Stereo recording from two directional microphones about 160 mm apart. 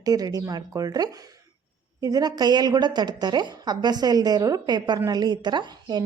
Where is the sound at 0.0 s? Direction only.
25° right (ahead or behind).